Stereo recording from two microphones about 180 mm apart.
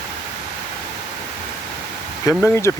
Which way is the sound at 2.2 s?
15° left (ahead or behind).